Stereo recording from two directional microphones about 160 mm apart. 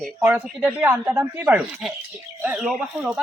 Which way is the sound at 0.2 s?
10° right (ahead or behind).